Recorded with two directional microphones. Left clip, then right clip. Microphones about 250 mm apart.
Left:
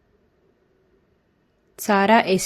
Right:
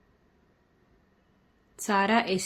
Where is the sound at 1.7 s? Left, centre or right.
Left.